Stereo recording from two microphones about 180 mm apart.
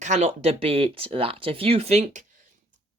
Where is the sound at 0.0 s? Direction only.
40° right (ahead or behind).